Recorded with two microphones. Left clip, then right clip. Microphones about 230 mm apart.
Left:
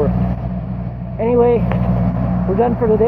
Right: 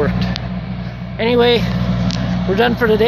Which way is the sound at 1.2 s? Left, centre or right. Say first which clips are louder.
Even; right.